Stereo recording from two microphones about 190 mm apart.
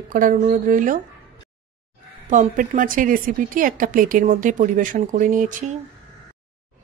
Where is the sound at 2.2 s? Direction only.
40° right (ahead or behind).